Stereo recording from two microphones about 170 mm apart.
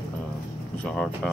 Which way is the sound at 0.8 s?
5° left (ahead or behind).